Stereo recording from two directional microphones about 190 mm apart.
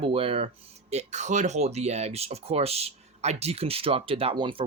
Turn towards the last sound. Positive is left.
turn(degrees=-25)  # may be behind; listen again after turning